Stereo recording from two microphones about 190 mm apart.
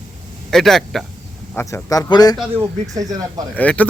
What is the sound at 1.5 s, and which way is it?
Speech, 15° left (ahead or behind).